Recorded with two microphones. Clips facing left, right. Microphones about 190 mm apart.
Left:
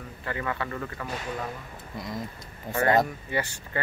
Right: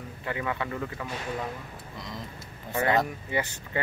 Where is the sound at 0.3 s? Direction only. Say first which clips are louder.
Even; 15° right (ahead or behind).